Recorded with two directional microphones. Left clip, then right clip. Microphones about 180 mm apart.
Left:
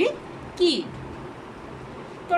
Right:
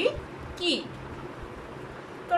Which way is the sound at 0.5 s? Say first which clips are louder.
Left 6 dB; 20° left (ahead or behind).